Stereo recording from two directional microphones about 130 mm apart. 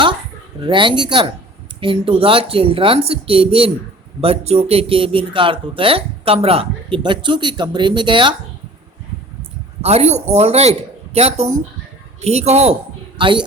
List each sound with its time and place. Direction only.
0.6 s speech: 40° right (ahead or behind)
9.8 s speech: 55° right (ahead or behind)
13.1 s a woman's voice: 40° right (ahead or behind)